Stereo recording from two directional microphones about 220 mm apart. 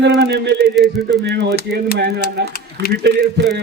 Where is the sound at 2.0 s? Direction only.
45° right (ahead or behind).